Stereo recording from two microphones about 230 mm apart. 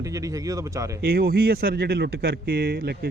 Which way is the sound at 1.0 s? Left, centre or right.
Right.